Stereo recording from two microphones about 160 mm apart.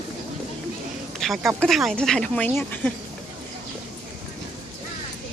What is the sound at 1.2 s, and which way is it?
Speech, centre (ahead or behind).